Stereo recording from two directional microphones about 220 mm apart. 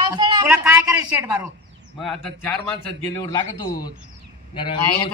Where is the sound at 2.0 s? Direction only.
Centre (ahead or behind).